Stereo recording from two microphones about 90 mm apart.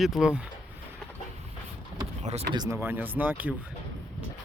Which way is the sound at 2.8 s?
20° right (ahead or behind).